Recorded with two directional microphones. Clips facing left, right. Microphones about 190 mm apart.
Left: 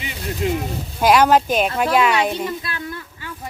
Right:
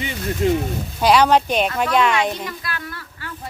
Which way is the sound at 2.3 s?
25° left (ahead or behind).